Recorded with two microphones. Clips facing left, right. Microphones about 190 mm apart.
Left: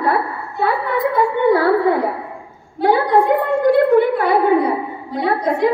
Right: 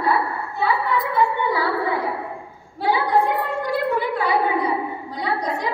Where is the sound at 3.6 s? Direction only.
55° left (ahead or behind).